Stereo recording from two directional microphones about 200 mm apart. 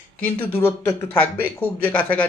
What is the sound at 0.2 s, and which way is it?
Speech, 10° left (ahead or behind).